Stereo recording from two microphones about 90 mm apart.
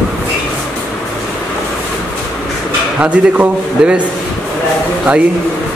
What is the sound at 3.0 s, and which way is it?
A man's voice, 15° right (ahead or behind).